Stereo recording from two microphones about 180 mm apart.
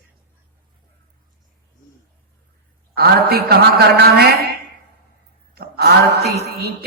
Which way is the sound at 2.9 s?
60° right (ahead or behind).